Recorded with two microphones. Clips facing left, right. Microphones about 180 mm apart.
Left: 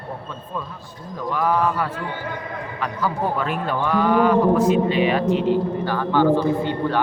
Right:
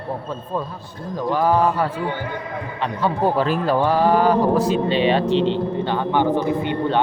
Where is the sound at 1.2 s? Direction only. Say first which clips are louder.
Right 3 dB; 30° right (ahead or behind).